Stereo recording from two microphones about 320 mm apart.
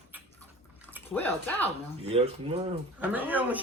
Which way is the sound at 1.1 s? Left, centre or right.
Centre.